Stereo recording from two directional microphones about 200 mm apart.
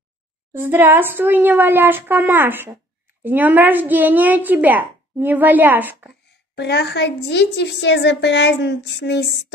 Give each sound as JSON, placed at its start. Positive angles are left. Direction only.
{"t": 0.5, "sound": "a woman's voice", "side_deg": -10}
{"t": 6.5, "sound": "a woman's voice", "side_deg": 55}